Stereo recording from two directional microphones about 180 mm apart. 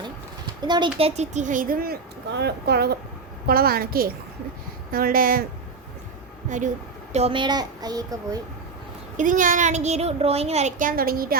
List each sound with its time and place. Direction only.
0.6 s a woman's voice: 25° right (ahead or behind); by 5.5 s 55° right (ahead or behind)
6.5 s speech: 45° right (ahead or behind)
7.1 s a child's voice: 35° right (ahead or behind)
9.1 s speech: 45° right (ahead or behind)